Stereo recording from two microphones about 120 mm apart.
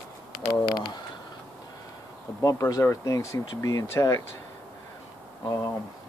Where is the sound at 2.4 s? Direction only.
30° left (ahead or behind).